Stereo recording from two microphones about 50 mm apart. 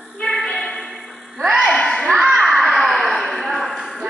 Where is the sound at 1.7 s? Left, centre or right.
Centre.